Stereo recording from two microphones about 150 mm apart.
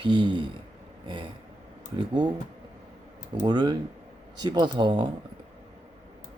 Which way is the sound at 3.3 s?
30° right (ahead or behind).